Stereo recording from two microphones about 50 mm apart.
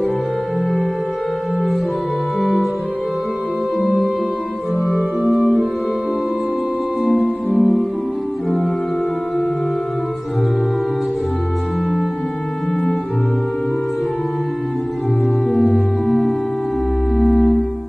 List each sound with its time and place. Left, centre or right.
2.4 s music: centre
7.4 s music: left
15.5 s music: centre